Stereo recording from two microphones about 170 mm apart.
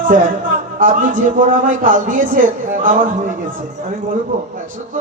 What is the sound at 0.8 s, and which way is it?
A man's voice, 50° right (ahead or behind).